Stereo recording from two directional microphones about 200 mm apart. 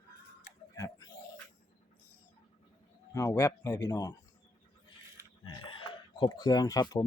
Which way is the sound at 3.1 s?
15° left (ahead or behind).